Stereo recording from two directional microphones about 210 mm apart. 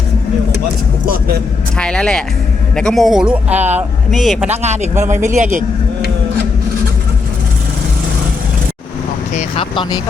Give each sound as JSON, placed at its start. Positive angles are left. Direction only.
{"t": 1.8, "sound": "speech", "side_deg": 5}
{"t": 4.5, "sound": "speech", "side_deg": -30}
{"t": 9.3, "sound": "speech", "side_deg": 25}